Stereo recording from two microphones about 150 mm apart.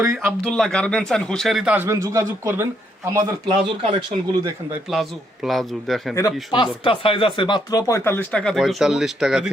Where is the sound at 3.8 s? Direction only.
35° right (ahead or behind).